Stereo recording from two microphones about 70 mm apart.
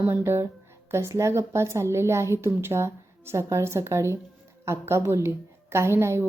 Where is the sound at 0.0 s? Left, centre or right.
Right.